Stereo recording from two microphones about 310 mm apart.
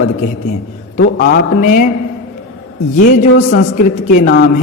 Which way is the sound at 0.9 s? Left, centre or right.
Left.